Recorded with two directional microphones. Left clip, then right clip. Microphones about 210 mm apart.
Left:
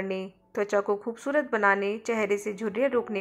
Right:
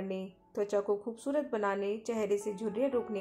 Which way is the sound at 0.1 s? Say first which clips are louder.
Left 6 dB; 15° left (ahead or behind).